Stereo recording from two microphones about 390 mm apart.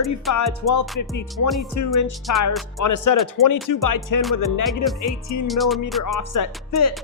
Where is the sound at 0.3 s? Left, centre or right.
Left.